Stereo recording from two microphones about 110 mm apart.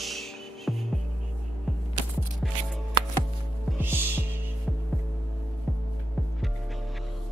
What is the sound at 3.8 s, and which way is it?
Music, 20° right (ahead or behind).